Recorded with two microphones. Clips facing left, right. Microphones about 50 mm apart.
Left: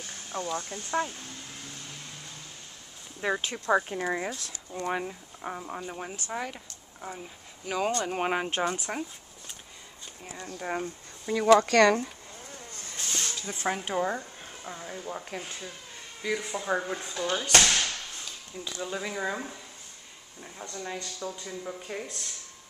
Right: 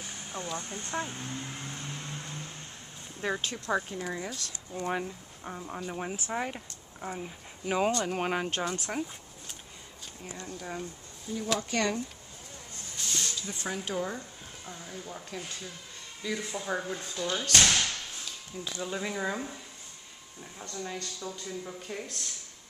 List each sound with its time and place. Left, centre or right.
0.0 s a sound: centre
0.6 s speech: right
1.0 s a sound: right
3.2 s speech: centre; by 4.3 s left
4.3 s speech: centre
5.0 s speech: left
5.9 s speech: centre
8.0 s speech: centre
8.7 s speech: centre
10.6 s speech: left
11.3 s speech: left
11.6 s speech: left
12.9 s a sound: left
13.5 s speech: left; by 22.3 s centre